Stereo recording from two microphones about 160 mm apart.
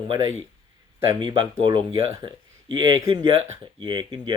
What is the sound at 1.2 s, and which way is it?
Speech, 30° right (ahead or behind).